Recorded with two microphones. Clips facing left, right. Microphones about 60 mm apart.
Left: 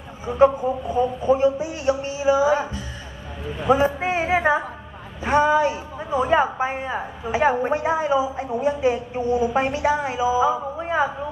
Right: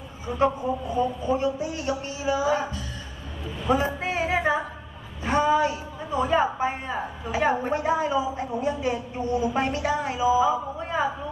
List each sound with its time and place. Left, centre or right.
0.3 s a woman's voice: left